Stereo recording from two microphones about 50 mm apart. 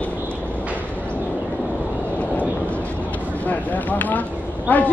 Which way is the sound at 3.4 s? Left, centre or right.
Left.